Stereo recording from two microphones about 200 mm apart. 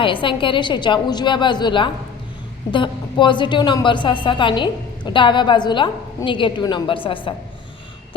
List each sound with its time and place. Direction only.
0.0 s a woman's voice: 25° left (ahead or behind)